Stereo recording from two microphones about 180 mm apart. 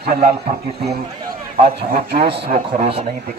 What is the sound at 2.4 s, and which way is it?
Speech, 30° right (ahead or behind).